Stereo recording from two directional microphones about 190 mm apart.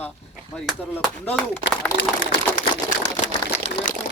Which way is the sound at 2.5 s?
45° left (ahead or behind).